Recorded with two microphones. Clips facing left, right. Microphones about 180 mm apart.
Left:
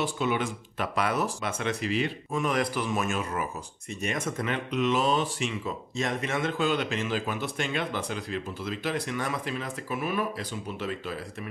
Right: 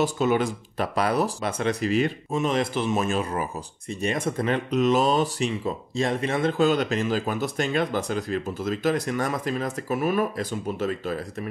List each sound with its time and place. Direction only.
0.0 s speech: 40° right (ahead or behind)
2.3 s a man's voice: 25° right (ahead or behind); by 11.1 s 45° right (ahead or behind)